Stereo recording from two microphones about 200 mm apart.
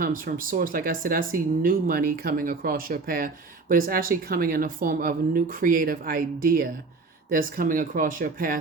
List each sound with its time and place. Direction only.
0.0 s speech: 45° right (ahead or behind)